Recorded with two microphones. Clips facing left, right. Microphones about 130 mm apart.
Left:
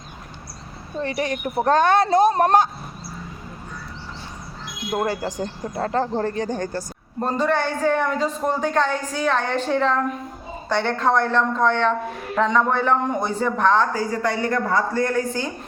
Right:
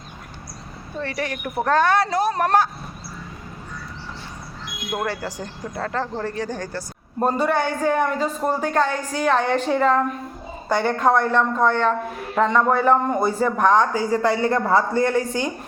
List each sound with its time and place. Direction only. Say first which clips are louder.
0.9 s a woman's voice: left 3 dB; 20° left (ahead or behind)
4.9 s a woman's voice: left 3 dB; 15° left (ahead or behind); by 6.3 s 35° left (ahead or behind)
6.3 s a woman's voice: left 2 dB; 20° left (ahead or behind)
7.2 s a woman's voice: right 1 dB; 10° right (ahead or behind)
13.9 s speech: right 3 dB; 30° right (ahead or behind)